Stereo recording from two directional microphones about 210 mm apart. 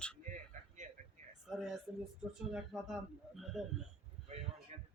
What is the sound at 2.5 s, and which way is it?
Speech, centre (ahead or behind).